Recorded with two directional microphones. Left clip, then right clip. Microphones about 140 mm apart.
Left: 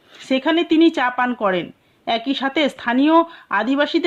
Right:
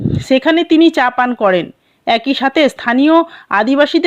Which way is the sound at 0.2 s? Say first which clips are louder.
Right 6 dB; 40° right (ahead or behind).